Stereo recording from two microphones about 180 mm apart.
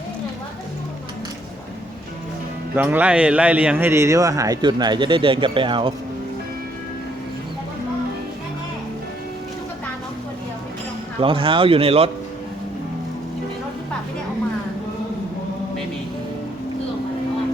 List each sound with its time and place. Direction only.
2.7 s a man's voice: 10° right (ahead or behind); by 5.9 s 30° right (ahead or behind)
11.2 s speech: 30° right (ahead or behind)